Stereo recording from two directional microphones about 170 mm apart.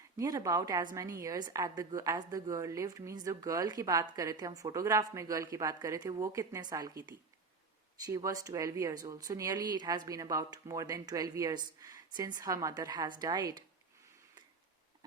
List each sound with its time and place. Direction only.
0.2 s a woman's voice: 20° right (ahead or behind)
8.0 s a woman's voice: 20° right (ahead or behind)